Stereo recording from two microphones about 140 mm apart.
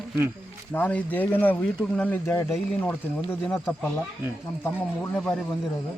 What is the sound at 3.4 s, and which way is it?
Speech, 5° left (ahead or behind).